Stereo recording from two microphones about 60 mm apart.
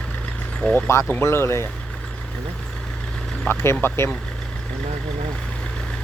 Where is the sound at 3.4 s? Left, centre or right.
Left.